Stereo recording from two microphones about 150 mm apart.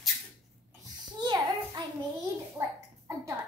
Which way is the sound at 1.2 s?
30° right (ahead or behind).